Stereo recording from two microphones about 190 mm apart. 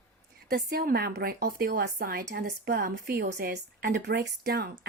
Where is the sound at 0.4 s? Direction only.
50° right (ahead or behind).